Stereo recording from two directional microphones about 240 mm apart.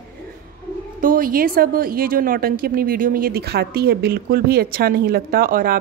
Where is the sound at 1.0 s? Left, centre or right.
Right.